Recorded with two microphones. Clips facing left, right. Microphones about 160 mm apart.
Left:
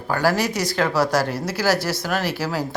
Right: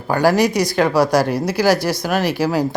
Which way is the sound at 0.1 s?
15° right (ahead or behind).